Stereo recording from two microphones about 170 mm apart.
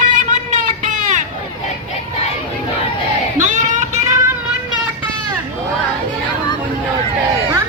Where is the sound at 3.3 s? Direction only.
45° right (ahead or behind).